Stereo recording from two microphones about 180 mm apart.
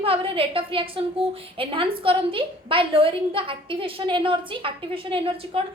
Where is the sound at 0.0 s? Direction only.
30° right (ahead or behind).